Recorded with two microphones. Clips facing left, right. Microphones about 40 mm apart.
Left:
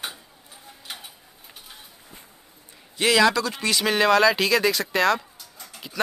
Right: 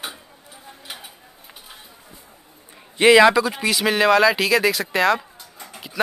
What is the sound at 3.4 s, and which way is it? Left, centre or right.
Speech, centre.